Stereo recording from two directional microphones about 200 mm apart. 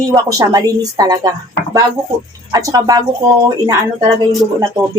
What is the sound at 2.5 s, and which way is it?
Speech, 20° right (ahead or behind).